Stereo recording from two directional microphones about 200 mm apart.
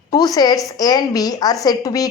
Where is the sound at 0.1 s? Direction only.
20° left (ahead or behind).